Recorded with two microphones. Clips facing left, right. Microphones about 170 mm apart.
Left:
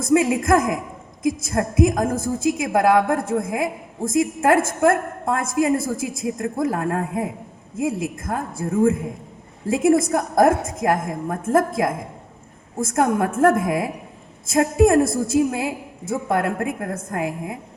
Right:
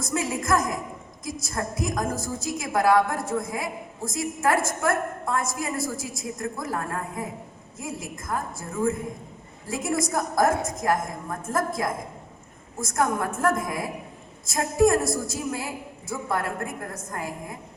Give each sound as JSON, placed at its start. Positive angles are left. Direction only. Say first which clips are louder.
{"t": 0.0, "sound": "a woman's voice", "louder": "left 10 dB", "side_deg": 60}